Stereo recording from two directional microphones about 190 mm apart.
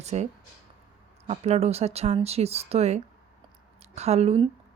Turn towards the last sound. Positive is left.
turn(degrees=-30)  # may be behind; listen again after turning